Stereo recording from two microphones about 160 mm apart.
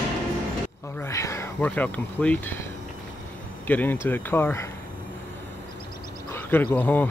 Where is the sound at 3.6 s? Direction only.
10° left (ahead or behind).